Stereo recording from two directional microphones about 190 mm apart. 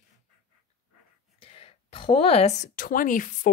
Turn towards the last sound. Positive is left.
turn(degrees=45)  # may be behind; listen again after turning